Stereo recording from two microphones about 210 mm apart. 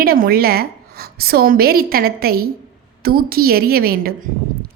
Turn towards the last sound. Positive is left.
turn(degrees=-45)  # may be behind; listen again after turning